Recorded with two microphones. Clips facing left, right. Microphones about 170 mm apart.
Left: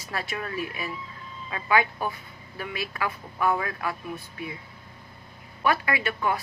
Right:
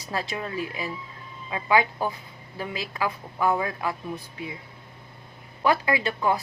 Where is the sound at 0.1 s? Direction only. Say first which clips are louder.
Right 2 dB; 20° right (ahead or behind).